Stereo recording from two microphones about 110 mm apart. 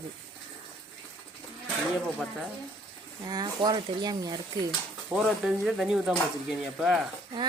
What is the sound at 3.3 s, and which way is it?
Speech, 40° right (ahead or behind).